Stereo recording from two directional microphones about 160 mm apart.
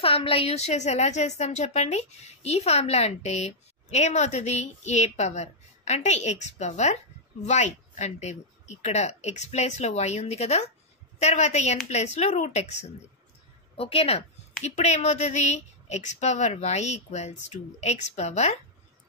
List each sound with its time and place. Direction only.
0.0 s a woman's voice: 35° left (ahead or behind)